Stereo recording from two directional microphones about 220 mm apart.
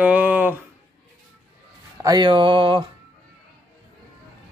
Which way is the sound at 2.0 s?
20° right (ahead or behind).